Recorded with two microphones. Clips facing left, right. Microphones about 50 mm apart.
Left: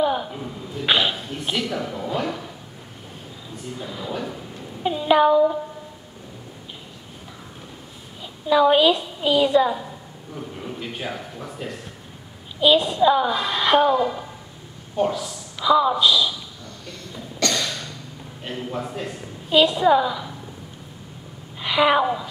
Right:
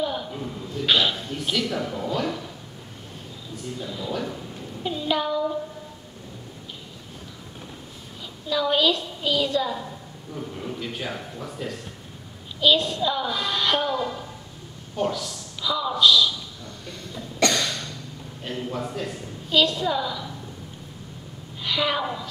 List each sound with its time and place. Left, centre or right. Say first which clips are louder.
0.0 s a woman's voice: left 5 dB; centre
3.7 s a woman's voice: even; centre
8.2 s a woman's voice: left 8 dB; left
17.5 s a sound: even; centre
18.4 s a woman's voice: left 1 dB; centre
19.5 s a woman's voice: left 6 dB; centre
21.5 s a woman's voice: left 7 dB; left